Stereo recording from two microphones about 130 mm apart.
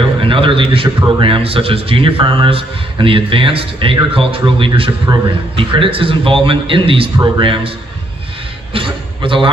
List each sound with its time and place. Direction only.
0.2 s a man's voice: 40° right (ahead or behind)
8.7 s a man's voice: 45° right (ahead or behind)